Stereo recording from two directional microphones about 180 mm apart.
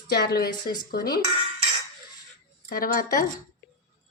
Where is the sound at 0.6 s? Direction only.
25° left (ahead or behind).